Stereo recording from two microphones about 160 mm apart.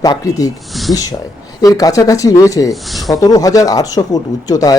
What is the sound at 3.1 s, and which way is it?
Speech, 25° left (ahead or behind).